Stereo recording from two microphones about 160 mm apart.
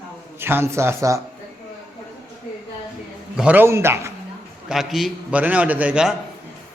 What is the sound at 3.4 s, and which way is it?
Speech, 10° right (ahead or behind).